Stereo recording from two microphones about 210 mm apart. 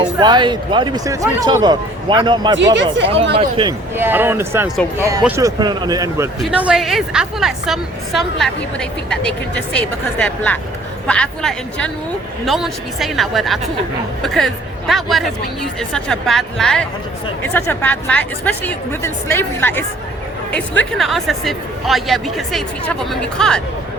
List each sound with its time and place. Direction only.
0.0 s speech: 20° right (ahead or behind)
3.9 s a woman's voice: 10° right (ahead or behind)